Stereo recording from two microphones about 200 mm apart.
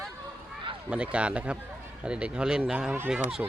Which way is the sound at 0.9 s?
5° right (ahead or behind).